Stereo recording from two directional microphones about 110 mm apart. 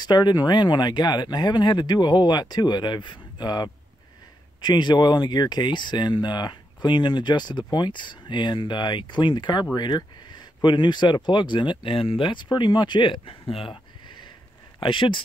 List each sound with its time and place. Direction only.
0.0 s speech: 40° left (ahead or behind); by 13.7 s 55° left (ahead or behind)
14.0 s a sound: 45° left (ahead or behind)
14.8 s speech: 50° left (ahead or behind)